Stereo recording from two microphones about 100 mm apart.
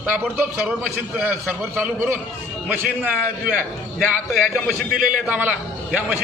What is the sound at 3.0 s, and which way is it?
Speech, 15° right (ahead or behind).